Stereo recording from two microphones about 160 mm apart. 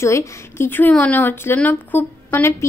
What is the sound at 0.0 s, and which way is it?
A woman's voice, 15° left (ahead or behind).